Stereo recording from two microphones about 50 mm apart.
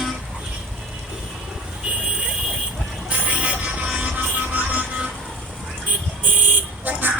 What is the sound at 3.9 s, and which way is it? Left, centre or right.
Music, right.